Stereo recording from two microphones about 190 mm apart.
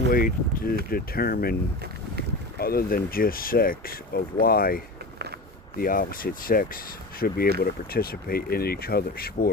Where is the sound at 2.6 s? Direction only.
50° left (ahead or behind).